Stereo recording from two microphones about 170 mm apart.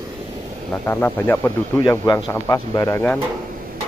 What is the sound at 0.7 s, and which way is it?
Speech, 15° left (ahead or behind).